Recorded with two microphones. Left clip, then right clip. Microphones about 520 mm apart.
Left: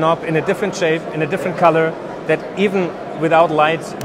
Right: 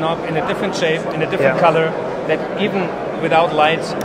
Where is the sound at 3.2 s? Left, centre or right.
Left.